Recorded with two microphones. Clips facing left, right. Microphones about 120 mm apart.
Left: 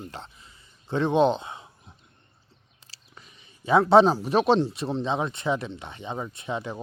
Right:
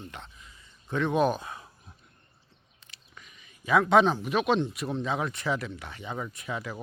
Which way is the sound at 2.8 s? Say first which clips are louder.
Left 1 dB; 30° left (ahead or behind).